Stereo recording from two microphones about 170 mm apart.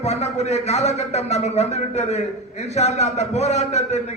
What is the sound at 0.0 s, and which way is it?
A man's voice, 40° left (ahead or behind).